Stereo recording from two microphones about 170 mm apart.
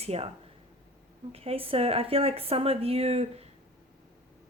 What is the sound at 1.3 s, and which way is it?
Speech, 35° right (ahead or behind).